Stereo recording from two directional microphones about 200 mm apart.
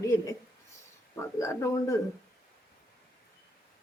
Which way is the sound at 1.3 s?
15° left (ahead or behind).